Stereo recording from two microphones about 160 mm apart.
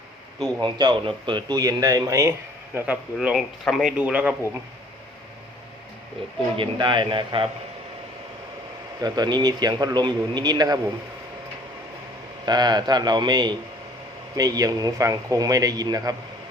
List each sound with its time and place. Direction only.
0.3 s speech: 25° right (ahead or behind)
2.7 s a man's voice: 10° right (ahead or behind)
6.6 s a man's voice: 30° right (ahead or behind)
9.0 s speech: 25° right (ahead or behind)
12.5 s speech: 25° right (ahead or behind)